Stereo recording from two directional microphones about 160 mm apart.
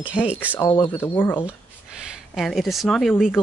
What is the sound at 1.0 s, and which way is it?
Speech, 15° left (ahead or behind).